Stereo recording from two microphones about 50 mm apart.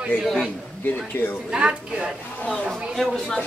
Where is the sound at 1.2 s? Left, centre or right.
Left.